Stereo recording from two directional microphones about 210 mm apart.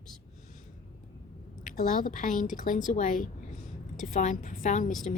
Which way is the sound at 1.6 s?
35° left (ahead or behind).